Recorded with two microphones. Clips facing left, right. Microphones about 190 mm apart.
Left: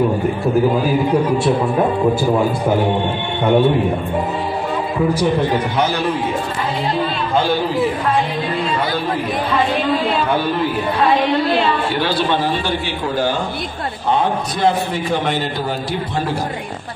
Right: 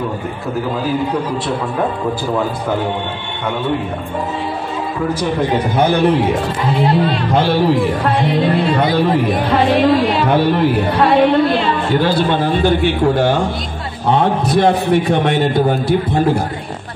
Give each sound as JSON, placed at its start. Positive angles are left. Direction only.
{"t": 5.8, "sound": "a man's voice", "side_deg": -60}